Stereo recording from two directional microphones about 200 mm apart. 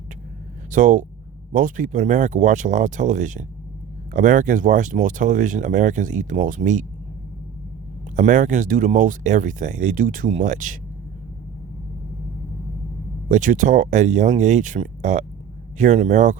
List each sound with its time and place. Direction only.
0.7 s speech: 40° right (ahead or behind)
8.1 s speech: 40° right (ahead or behind)
13.2 s speech: 40° right (ahead or behind)